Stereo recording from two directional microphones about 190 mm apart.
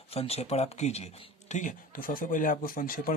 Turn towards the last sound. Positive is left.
turn(degrees=45)  # may be behind; listen again after turning